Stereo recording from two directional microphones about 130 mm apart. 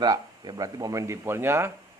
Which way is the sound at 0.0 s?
30° right (ahead or behind).